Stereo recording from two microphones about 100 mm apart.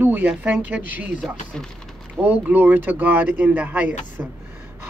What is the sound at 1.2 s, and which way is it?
Speech, 5° left (ahead or behind).